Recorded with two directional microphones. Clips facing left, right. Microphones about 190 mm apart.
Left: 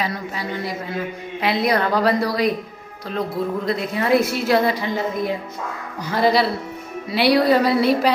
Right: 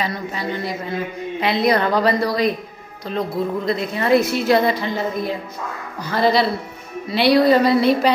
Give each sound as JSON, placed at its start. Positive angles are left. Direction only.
{"t": 0.0, "sound": "a woman's voice", "side_deg": 5}
{"t": 6.0, "sound": "a woman's voice", "side_deg": 10}